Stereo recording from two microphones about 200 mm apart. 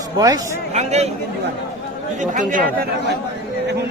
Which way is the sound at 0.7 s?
35° right (ahead or behind).